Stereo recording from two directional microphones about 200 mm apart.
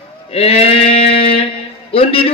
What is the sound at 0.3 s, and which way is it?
A man's voice, 30° left (ahead or behind).